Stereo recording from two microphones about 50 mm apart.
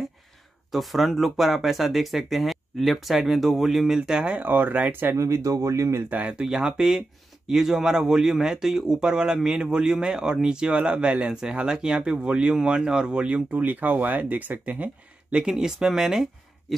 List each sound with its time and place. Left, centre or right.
0.7 s speech: centre
4.3 s speech: right
5.1 s speech: right
6.0 s speech: right
6.4 s speech: centre; by 14.9 s right
15.5 s speech: centre